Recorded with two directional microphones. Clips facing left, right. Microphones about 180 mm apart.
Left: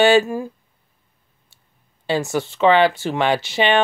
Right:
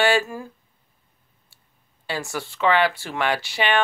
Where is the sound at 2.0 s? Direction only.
20° left (ahead or behind).